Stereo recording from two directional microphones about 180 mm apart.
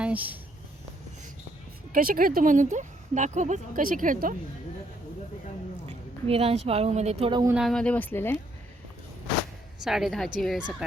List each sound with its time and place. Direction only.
0.0 s speech: 10° right (ahead or behind)
1.9 s speech: 50° right (ahead or behind)
6.2 s a woman's voice: 35° right (ahead or behind)
7.5 s speech: centre (ahead or behind)
9.8 s a woman's voice: centre (ahead or behind)